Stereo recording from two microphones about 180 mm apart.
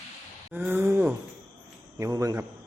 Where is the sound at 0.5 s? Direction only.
10° right (ahead or behind).